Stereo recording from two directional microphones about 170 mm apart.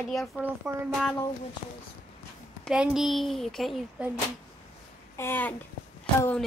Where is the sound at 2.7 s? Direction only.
5° right (ahead or behind).